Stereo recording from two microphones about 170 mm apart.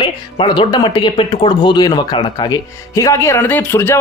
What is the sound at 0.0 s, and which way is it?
Speech, 30° left (ahead or behind).